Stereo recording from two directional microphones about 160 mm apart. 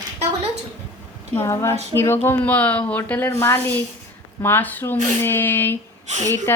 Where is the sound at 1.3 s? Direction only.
15° left (ahead or behind).